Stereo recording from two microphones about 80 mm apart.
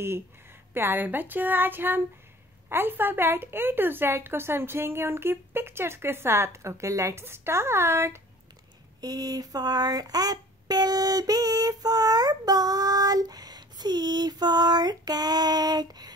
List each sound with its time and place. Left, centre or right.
0.7 s a woman's voice: right
9.0 s speech: right